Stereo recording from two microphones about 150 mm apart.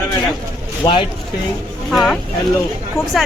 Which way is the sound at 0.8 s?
30° left (ahead or behind).